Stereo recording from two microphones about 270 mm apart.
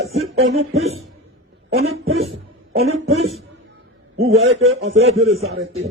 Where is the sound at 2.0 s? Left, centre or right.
Right.